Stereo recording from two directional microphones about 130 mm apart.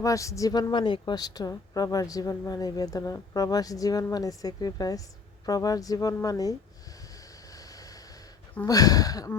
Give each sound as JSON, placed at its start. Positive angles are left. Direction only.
{"t": 0.0, "sound": "speech", "side_deg": 25}
{"t": 0.7, "sound": "speech", "side_deg": 35}
{"t": 7.5, "sound": "vehicle", "side_deg": 25}
{"t": 8.6, "sound": "speech", "side_deg": 30}